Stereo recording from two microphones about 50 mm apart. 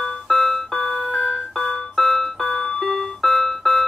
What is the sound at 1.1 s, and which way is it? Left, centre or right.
Music, centre.